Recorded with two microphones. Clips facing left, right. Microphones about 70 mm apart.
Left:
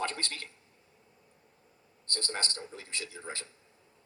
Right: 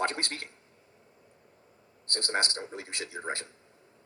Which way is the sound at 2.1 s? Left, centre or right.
Right.